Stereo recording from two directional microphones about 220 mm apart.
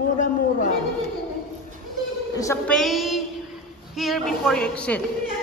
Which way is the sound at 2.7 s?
Centre (ahead or behind).